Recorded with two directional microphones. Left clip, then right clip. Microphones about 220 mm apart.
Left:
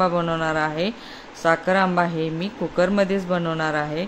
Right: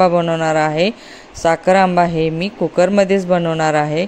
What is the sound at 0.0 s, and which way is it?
Speech, 25° right (ahead or behind).